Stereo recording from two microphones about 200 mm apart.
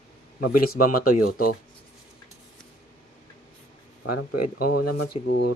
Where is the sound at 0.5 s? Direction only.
45° left (ahead or behind).